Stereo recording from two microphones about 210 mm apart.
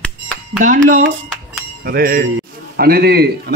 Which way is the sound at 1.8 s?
50° right (ahead or behind).